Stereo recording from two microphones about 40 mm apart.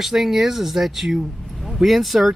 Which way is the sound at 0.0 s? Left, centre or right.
Centre.